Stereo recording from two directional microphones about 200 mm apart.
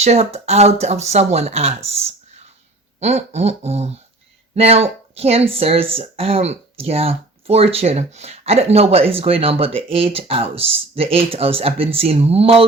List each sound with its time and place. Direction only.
0.0 s speech: 30° right (ahead or behind)